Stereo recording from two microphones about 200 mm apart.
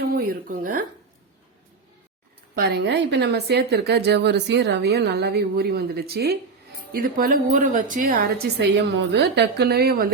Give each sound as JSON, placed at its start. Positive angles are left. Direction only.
{"t": 0.0, "sound": "speech", "side_deg": -50}
{"t": 2.6, "sound": "a woman's voice", "side_deg": -55}